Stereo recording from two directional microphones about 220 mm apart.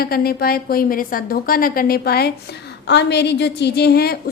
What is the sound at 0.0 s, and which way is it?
A woman's voice, 45° left (ahead or behind).